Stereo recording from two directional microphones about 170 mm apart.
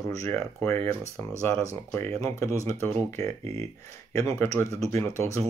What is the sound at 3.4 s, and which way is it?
Speech, 40° right (ahead or behind).